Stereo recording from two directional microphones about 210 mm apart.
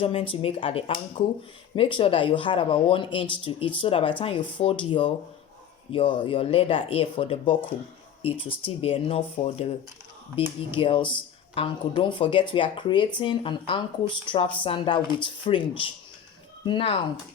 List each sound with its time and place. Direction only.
0.0 s speech: 25° left (ahead or behind)
10.7 s speech: 25° left (ahead or behind)